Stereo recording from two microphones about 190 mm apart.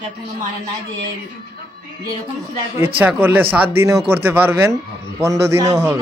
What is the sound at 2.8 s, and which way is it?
Speech, 10° right (ahead or behind).